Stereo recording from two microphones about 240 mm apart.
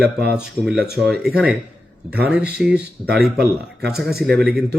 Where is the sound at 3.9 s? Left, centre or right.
Centre.